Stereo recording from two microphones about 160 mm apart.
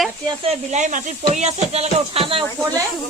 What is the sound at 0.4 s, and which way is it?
Speech, 45° right (ahead or behind).